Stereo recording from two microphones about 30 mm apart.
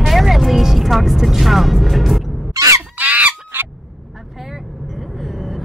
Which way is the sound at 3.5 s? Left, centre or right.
Right.